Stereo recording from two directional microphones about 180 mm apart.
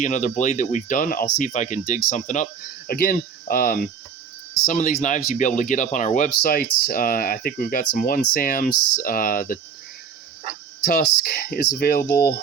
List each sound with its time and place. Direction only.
0.0 s speech: 45° left (ahead or behind)
10.8 s speech: 55° left (ahead or behind)